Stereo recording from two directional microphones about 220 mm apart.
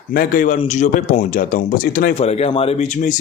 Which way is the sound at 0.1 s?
40° left (ahead or behind).